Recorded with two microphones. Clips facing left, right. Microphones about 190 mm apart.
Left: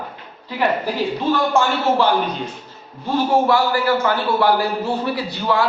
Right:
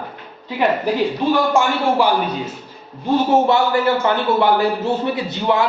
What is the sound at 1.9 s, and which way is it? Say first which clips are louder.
Speech: even; 10° right (ahead or behind).